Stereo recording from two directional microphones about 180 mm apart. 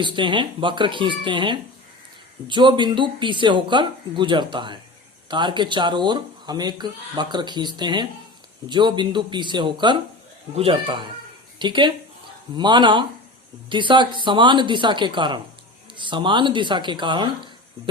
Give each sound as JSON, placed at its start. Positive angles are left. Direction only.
{"t": 0.0, "sound": "speech", "side_deg": -25}